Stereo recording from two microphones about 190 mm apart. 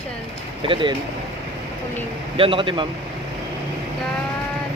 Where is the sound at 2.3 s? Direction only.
30° right (ahead or behind).